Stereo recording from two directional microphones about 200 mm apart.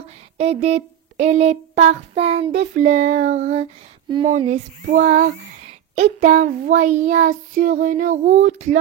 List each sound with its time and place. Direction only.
0.4 s child singing: 30° right (ahead or behind)